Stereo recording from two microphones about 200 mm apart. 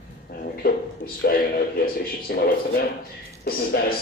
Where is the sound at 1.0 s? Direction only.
45° left (ahead or behind).